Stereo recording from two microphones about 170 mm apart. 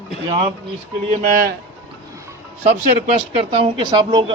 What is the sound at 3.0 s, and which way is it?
Speech, 35° right (ahead or behind).